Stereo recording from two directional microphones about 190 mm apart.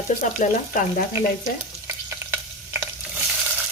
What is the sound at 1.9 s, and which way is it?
Frying, 10° right (ahead or behind).